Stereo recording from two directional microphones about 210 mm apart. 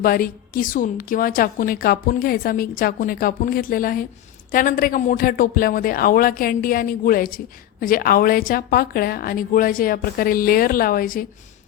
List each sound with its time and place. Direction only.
0.0 s speech: 45° left (ahead or behind)